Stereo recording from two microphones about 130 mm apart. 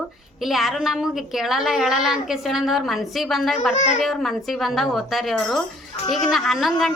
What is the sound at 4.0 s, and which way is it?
A woman's voice, centre (ahead or behind).